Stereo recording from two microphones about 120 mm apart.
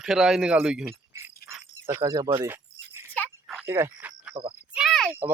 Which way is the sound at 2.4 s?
20° right (ahead or behind).